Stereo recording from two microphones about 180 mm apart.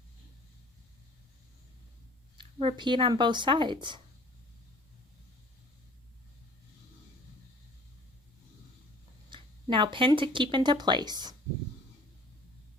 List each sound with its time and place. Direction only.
2.4 s speech: 30° right (ahead or behind)
9.3 s speech: 25° right (ahead or behind)